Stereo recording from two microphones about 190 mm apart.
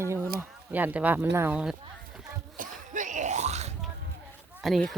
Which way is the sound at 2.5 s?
40° right (ahead or behind).